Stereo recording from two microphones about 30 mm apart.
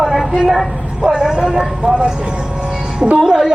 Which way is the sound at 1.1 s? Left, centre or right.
Right.